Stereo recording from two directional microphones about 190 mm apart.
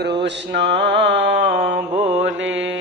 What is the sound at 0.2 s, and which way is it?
Mantra, 65° right (ahead or behind).